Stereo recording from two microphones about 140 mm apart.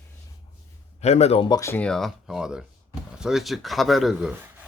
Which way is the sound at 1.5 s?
25° left (ahead or behind).